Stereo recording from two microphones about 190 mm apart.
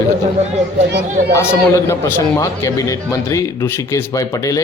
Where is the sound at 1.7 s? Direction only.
15° left (ahead or behind).